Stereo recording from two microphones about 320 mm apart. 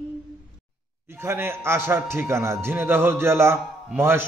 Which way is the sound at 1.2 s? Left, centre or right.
Centre.